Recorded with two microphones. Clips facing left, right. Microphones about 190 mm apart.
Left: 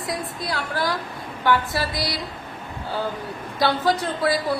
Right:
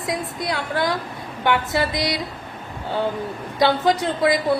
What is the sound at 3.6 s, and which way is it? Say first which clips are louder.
Speech: right 3 dB; 20° right (ahead or behind).